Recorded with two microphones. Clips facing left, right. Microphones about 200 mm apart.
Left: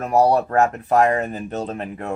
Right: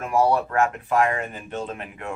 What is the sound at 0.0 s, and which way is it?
Speech, 40° left (ahead or behind).